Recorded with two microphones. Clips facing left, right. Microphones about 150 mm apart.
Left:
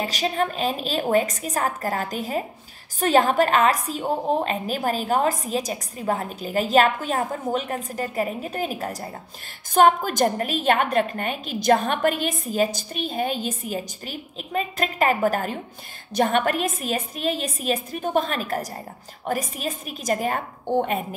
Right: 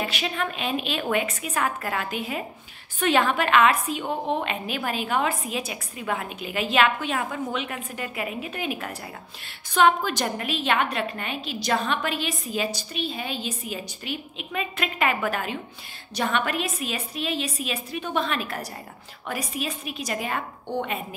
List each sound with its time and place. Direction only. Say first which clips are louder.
0.0 s a woman's voice: left 4 dB; 40° left (ahead or behind)